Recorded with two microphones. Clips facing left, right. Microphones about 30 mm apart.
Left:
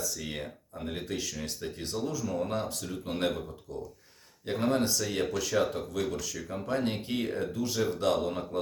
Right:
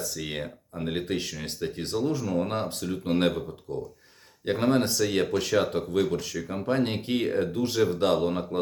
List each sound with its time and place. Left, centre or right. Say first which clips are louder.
0.0 s speech: right 3 dB; right